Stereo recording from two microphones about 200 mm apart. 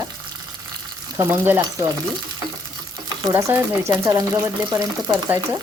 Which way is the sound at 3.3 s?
15° right (ahead or behind).